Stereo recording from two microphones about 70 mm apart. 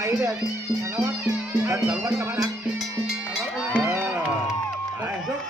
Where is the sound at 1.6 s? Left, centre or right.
Right.